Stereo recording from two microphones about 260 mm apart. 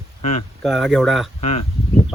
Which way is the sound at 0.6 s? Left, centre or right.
Centre.